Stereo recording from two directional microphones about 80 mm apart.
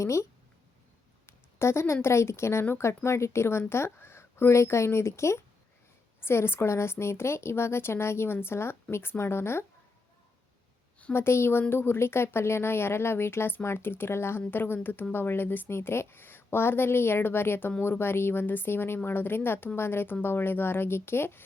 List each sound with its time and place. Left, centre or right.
0.0 s a woman's voice: left
1.3 s a woman's voice: left
11.1 s a woman's voice: left